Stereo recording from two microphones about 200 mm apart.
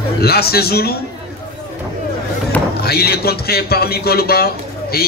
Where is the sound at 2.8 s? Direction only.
50° left (ahead or behind).